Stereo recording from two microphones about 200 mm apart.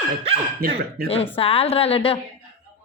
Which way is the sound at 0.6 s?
50° right (ahead or behind).